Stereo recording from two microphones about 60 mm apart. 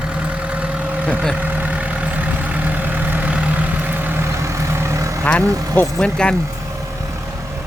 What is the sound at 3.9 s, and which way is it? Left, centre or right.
Vehicle, right.